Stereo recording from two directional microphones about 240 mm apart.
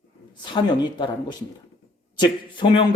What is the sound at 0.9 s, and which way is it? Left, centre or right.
A man's voice, centre.